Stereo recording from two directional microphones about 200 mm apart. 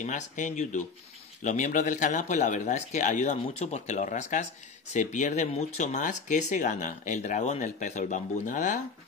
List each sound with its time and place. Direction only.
0.0 s speech: 35° left (ahead or behind)